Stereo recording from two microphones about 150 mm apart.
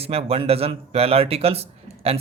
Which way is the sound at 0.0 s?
40° right (ahead or behind).